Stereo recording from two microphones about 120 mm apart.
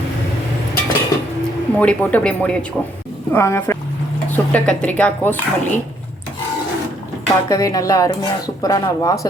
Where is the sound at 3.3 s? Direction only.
20° left (ahead or behind).